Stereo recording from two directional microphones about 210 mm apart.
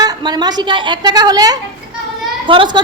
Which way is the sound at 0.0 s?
20° right (ahead or behind).